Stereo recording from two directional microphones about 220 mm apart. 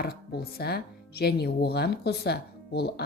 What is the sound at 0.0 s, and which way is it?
Speech, 45° left (ahead or behind).